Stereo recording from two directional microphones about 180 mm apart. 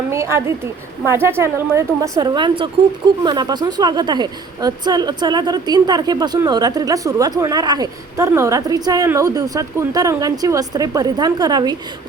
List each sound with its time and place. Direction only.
0.1 s a woman's voice: 15° right (ahead or behind)